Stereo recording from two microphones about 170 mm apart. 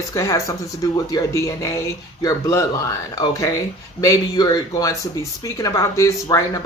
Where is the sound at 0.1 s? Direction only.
15° left (ahead or behind).